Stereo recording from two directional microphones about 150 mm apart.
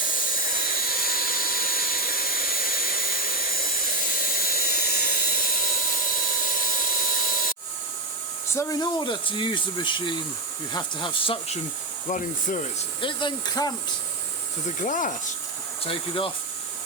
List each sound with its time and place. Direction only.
0.3 s vacuum cleaner: 70° left (ahead or behind)
8.5 s speech: 25° left (ahead or behind)
12.0 s speech: 55° left (ahead or behind)
13.0 s speech: 35° left (ahead or behind)
14.8 s speech: 60° left (ahead or behind)
15.8 s speech: 35° left (ahead or behind)